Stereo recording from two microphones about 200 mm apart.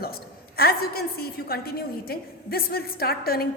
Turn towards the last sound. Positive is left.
turn(degrees=50)  # may be behind; listen again after turning